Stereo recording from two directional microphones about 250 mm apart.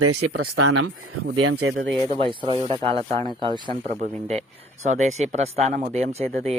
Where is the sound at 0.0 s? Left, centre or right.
Right.